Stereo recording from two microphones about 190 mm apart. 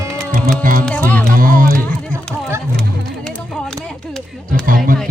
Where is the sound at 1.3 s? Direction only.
45° right (ahead or behind).